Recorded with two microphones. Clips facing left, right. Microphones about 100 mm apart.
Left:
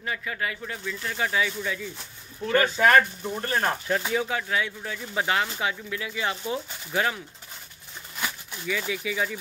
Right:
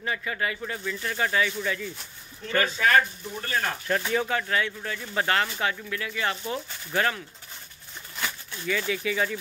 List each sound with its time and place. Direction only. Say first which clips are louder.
0.0 s speech: right 1 dB; centre (ahead or behind)
2.9 s speech: left 1 dB; 35° left (ahead or behind)
3.8 s speech: even; 10° left (ahead or behind)
8.2 s speech: even; 10° left (ahead or behind)